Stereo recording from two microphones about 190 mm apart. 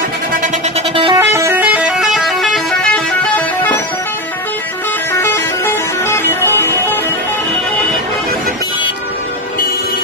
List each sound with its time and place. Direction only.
0.9 s vehicle: 25° right (ahead or behind)
1.3 s vehicle horn: 15° right (ahead or behind)
5.1 s music: 10° left (ahead or behind)